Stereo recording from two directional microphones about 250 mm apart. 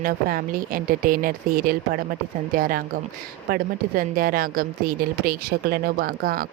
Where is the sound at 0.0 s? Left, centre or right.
Right.